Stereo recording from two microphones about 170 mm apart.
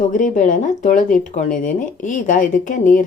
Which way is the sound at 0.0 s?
50° left (ahead or behind).